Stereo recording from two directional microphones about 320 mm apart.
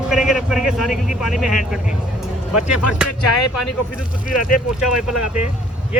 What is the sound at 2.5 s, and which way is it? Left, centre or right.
Speech, left.